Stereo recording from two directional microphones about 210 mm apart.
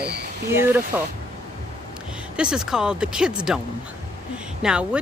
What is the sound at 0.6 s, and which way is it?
Speech, 10° right (ahead or behind).